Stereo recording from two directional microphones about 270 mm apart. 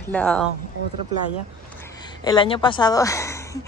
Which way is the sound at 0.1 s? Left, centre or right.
Centre.